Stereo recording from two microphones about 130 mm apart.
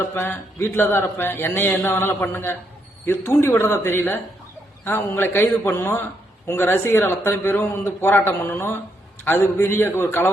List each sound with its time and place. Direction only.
0.0 s speech: 20° left (ahead or behind)